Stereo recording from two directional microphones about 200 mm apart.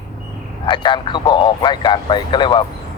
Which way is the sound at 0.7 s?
25° left (ahead or behind).